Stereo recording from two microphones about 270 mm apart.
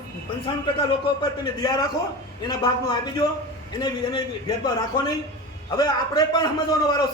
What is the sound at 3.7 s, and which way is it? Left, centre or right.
Speech, centre.